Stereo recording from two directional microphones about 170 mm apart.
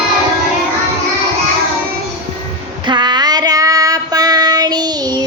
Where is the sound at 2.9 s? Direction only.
25° right (ahead or behind).